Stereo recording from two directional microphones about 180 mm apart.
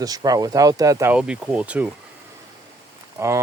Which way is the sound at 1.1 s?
5° right (ahead or behind).